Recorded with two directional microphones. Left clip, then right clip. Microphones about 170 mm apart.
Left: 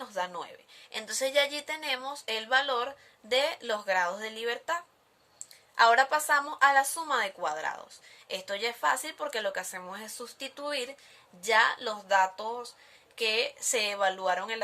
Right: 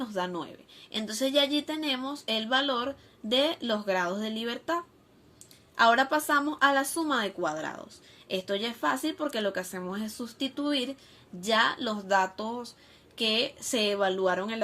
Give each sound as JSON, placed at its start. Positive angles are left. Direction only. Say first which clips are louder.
{"t": 0.0, "sound": "a woman's voice", "louder": "right 2 dB", "side_deg": 20}